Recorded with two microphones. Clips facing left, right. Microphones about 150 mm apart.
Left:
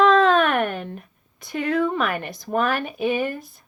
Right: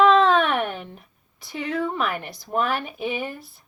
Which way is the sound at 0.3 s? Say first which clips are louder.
Left 2 dB; 50° left (ahead or behind).